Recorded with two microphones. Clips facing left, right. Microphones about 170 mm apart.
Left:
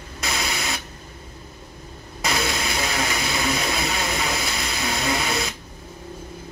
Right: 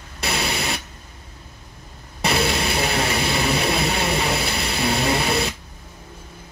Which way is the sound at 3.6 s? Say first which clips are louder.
Right 4 dB; 60° right (ahead or behind).